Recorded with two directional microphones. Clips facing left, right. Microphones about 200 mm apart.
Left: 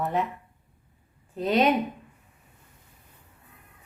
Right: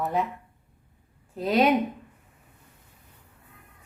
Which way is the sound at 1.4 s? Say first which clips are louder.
Even; 5° right (ahead or behind).